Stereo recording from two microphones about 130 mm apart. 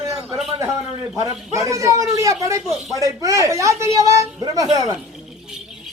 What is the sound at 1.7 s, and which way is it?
Speech, 25° right (ahead or behind).